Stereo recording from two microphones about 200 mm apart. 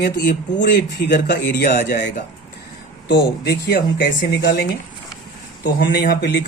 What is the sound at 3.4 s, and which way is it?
Speech, 55° left (ahead or behind).